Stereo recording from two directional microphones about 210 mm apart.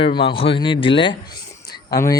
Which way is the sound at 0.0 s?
25° left (ahead or behind).